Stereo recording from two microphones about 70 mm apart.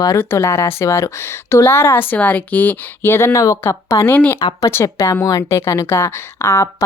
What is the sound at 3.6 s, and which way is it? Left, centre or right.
Speech, left.